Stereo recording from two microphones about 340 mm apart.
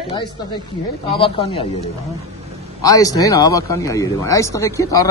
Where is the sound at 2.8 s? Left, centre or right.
Centre.